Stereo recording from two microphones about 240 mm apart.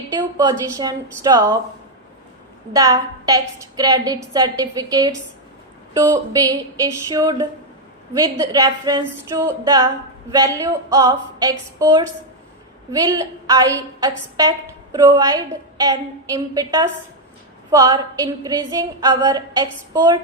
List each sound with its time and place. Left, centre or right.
0.1 s a woman's voice: centre
2.7 s a woman's voice: centre